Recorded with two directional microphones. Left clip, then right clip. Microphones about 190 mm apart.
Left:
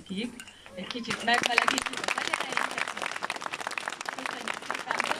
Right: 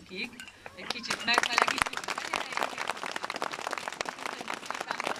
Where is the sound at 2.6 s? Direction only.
5° left (ahead or behind).